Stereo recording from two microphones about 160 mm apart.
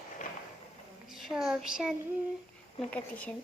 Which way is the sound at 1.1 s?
Centre (ahead or behind).